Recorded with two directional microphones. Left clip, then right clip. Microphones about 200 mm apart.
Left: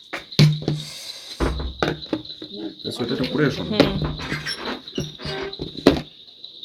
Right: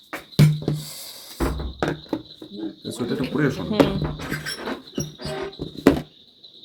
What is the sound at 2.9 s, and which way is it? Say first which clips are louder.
Speech: left 2 dB; 5° left (ahead or behind).